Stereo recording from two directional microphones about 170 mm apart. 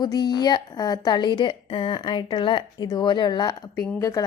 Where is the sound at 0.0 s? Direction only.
25° left (ahead or behind).